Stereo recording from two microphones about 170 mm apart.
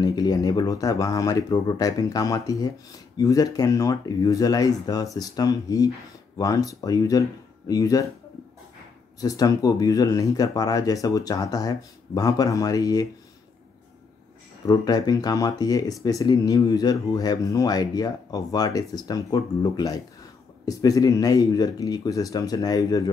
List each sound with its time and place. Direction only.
0.0 s speech: 20° left (ahead or behind)
9.2 s speech: 20° left (ahead or behind)
14.7 s speech: 20° left (ahead or behind)